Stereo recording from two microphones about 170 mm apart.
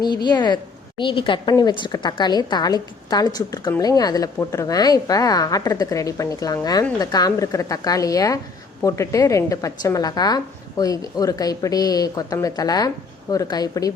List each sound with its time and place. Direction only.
0.0 s a woman's voice: 25° left (ahead or behind)